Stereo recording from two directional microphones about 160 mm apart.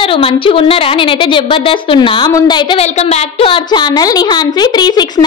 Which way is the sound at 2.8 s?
45° left (ahead or behind).